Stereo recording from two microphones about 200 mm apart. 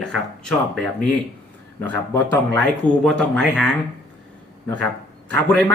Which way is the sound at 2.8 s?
5° left (ahead or behind).